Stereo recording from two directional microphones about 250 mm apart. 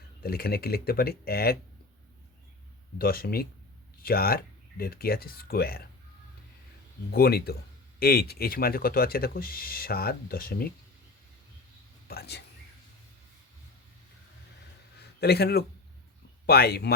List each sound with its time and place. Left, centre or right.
0.2 s speech: left
3.0 s speech: left
7.1 s speech: left
12.0 s speech: left
15.2 s speech: left